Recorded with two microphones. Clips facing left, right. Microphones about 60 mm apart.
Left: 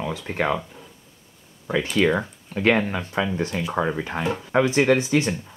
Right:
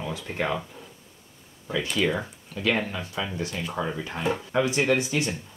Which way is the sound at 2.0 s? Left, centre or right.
Left.